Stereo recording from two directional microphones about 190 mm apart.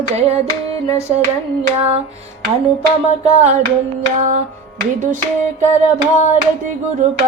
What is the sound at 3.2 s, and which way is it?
Music, 35° right (ahead or behind).